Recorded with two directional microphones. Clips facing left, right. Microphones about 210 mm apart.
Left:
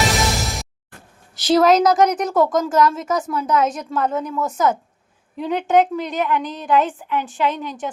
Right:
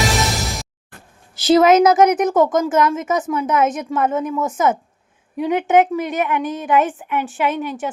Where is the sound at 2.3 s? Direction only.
20° right (ahead or behind).